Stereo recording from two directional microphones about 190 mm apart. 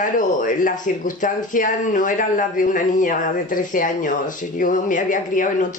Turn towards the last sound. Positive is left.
turn(degrees=45)  # may be behind; listen again after turning